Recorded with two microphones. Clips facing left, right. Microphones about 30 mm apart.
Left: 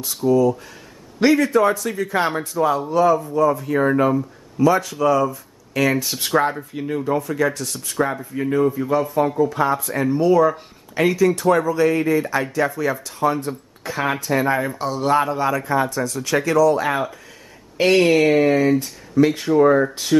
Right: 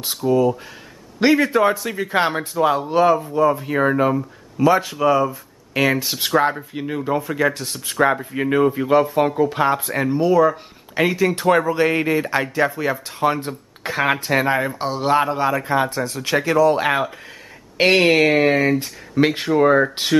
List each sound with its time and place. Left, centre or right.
0.3 s a man's voice: right
3.9 s speech: centre
4.6 s a man's voice: right
10.0 s speech: centre
11.0 s a man's voice: right
13.2 s a man's voice: right
15.6 s speech: right